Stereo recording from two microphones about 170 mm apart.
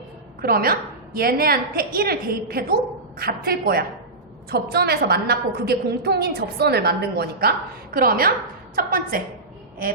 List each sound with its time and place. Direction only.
0.4 s a woman's voice: 60° right (ahead or behind)